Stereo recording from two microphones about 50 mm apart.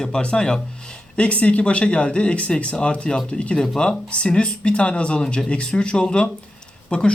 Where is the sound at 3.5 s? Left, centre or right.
Centre.